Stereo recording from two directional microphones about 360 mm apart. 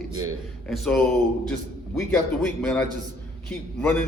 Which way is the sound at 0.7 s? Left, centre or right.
Centre.